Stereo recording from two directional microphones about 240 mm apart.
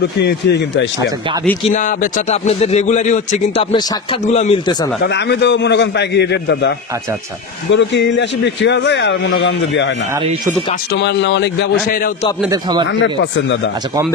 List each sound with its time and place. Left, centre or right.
0.2 s a man's voice: left
1.7 s a man's voice: left
5.0 s a man's voice: left
7.7 s a man's voice: left
11.0 s a man's voice: left
13.0 s a man's voice: left